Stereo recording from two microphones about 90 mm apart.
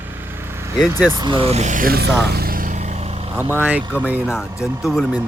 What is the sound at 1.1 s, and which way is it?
Speech, 55° right (ahead or behind).